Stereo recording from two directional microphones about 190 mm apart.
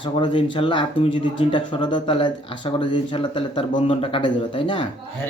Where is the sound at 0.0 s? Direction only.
25° left (ahead or behind).